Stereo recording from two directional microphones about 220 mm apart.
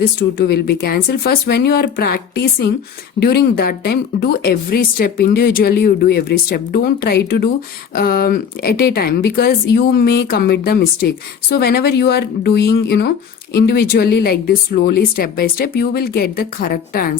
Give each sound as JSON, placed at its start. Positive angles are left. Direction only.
{"t": 0.2, "sound": "speech", "side_deg": 45}